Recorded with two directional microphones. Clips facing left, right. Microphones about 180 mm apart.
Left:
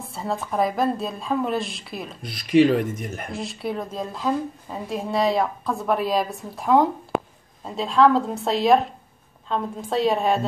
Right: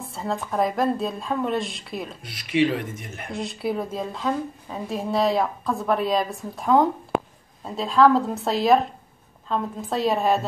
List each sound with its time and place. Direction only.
0.1 s a woman's voice: centre (ahead or behind)
2.2 s speech: 40° left (ahead or behind)
3.3 s a woman's voice: centre (ahead or behind)